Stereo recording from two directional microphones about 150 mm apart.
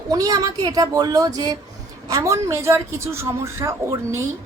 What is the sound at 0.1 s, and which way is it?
A woman's voice, 25° right (ahead or behind).